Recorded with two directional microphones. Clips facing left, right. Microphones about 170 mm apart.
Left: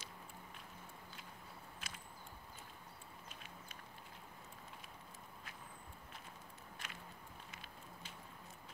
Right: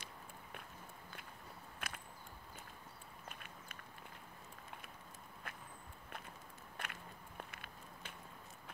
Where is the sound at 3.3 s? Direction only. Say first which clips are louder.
Right 4 dB; 55° right (ahead or behind).